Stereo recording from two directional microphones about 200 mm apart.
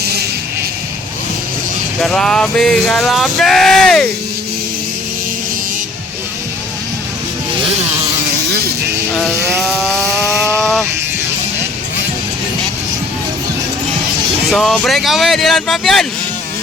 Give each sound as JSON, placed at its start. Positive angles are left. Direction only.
{"t": 0.0, "sound": "music", "side_deg": -55}
{"t": 2.0, "sound": "male singing", "side_deg": 5}
{"t": 9.1, "sound": "male singing", "side_deg": 0}
{"t": 14.4, "sound": "male singing", "side_deg": 0}